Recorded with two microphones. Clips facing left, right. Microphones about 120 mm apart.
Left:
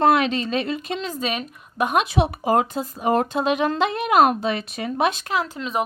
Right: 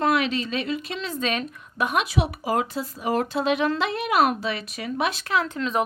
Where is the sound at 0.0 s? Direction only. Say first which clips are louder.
Left 4 dB; 30° left (ahead or behind).